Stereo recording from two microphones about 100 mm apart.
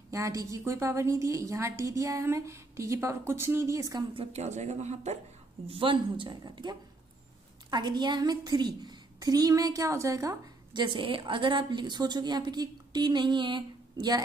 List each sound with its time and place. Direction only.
0.1 s a woman's voice: 35° right (ahead or behind)
4.1 s speech: 80° right
5.7 s a woman's voice: 60° right (ahead or behind); by 10.3 s 35° right (ahead or behind)
10.7 s a woman's voice: 50° right (ahead or behind)